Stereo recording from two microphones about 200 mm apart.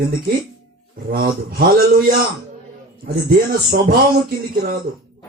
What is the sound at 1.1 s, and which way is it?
Speech, 50° right (ahead or behind).